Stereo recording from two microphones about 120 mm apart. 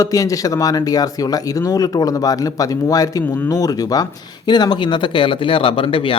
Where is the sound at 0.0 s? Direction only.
30° left (ahead or behind).